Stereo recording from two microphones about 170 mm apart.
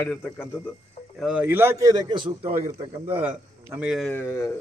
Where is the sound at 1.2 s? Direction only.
5° right (ahead or behind); by 2.5 s 30° right (ahead or behind).